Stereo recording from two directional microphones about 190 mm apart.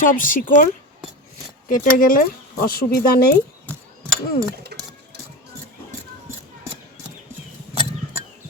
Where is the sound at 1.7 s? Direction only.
50° left (ahead or behind).